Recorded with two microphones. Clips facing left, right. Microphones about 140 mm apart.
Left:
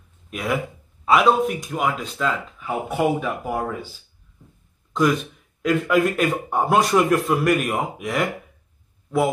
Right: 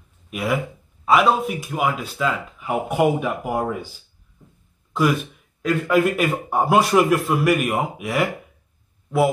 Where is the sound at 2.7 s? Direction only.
15° right (ahead or behind).